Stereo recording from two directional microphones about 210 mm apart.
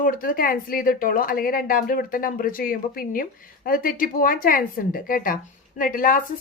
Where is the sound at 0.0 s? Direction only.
40° left (ahead or behind).